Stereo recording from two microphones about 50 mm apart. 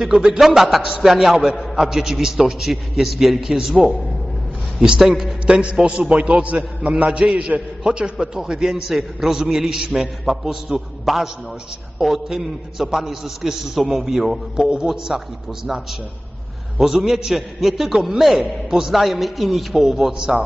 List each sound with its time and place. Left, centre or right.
0.0 s a man's voice: centre
5.5 s a man's voice: right